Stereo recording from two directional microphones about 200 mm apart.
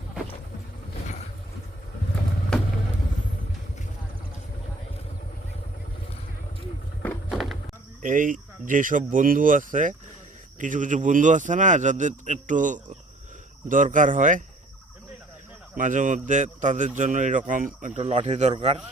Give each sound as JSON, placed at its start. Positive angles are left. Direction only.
{"t": 2.5, "sound": "vehicle", "side_deg": 5}
{"t": 7.0, "sound": "a sound", "side_deg": 5}
{"t": 8.0, "sound": "speech", "side_deg": -40}
{"t": 15.8, "sound": "speech", "side_deg": -40}